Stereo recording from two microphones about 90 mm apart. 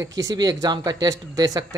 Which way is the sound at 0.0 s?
40° right (ahead or behind).